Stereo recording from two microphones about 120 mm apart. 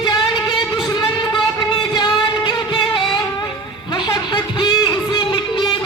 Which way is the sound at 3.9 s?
35° left (ahead or behind).